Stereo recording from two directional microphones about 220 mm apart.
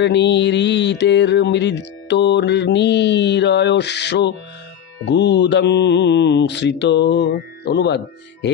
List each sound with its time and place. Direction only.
0.0 s mantra: 50° left (ahead or behind)